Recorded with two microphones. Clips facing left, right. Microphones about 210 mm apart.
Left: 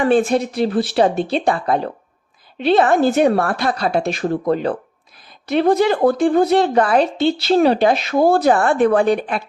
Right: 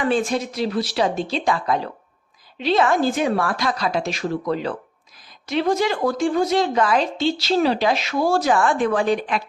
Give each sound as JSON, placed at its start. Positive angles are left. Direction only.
{"t": 0.1, "sound": "a woman's voice", "side_deg": 55}